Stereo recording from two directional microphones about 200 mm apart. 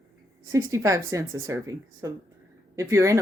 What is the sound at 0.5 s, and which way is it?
Speech, 15° right (ahead or behind).